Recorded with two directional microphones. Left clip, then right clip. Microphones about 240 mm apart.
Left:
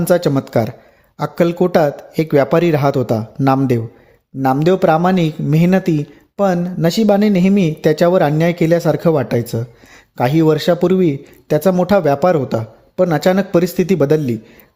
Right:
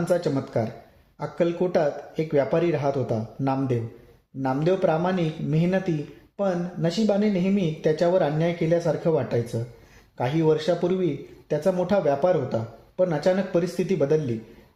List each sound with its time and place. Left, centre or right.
0.0 s speech: left